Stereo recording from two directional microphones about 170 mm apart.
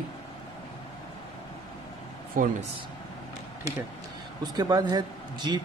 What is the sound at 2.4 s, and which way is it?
Speech, 55° right (ahead or behind).